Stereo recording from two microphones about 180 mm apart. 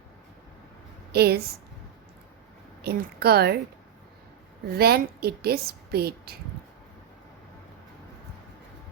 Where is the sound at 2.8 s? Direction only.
60° right (ahead or behind).